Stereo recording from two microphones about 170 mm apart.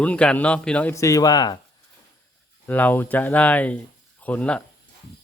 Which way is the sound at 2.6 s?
10° left (ahead or behind).